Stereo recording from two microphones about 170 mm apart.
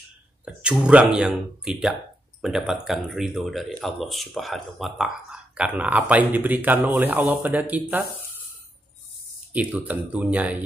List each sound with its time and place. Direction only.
0.5 s speech: 5° right (ahead or behind)
9.5 s speech: 10° right (ahead or behind)